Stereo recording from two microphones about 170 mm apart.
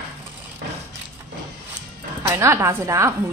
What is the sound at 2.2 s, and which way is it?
Speech, 15° right (ahead or behind).